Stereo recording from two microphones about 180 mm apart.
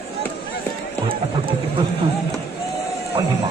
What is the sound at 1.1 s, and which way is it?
Speech, 30° right (ahead or behind).